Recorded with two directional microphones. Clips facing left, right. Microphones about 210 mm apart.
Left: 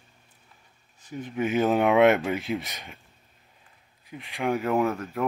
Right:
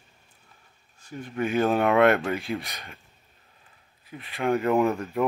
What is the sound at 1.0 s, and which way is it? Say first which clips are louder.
Speech: even; 20° left (ahead or behind).